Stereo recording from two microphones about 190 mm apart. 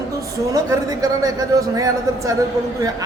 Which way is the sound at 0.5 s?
20° right (ahead or behind).